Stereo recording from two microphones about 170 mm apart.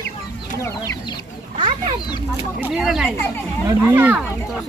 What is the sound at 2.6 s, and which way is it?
Speech, 5° right (ahead or behind).